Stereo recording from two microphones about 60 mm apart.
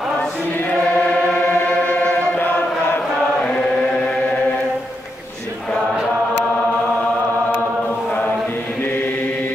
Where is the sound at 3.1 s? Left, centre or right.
Centre.